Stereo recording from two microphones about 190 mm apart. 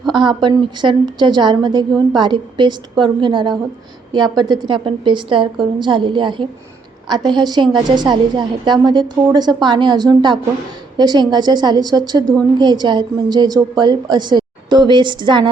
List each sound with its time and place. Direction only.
0.1 s a woman's voice: 25° right (ahead or behind)